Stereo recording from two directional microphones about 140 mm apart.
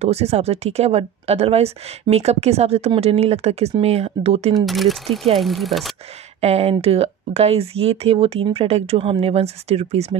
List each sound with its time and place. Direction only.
0.0 s speech: 50° right (ahead or behind)
4.6 s speech: centre (ahead or behind)
6.4 s speech: 50° right (ahead or behind)